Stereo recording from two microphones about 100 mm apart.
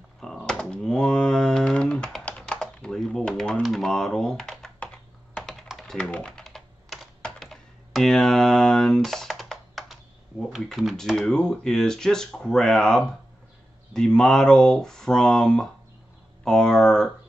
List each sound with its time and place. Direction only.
0.2 s a sound: 5° left (ahead or behind)
2.2 s typing: 10° left (ahead or behind)
3.6 s computer keyboard: centre (ahead or behind)
5.9 s typing: 10° left (ahead or behind)
7.2 s computer keyboard: 5° left (ahead or behind)
10.5 s speech: 5° right (ahead or behind)